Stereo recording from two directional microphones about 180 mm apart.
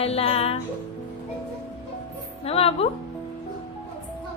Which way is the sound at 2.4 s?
35° left (ahead or behind).